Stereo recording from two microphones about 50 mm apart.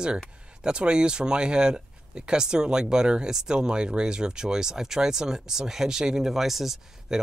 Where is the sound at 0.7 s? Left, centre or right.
Centre.